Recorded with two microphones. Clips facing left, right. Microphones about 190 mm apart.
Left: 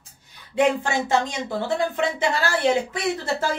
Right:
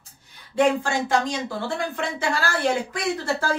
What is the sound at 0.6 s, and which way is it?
A woman's voice, 20° left (ahead or behind).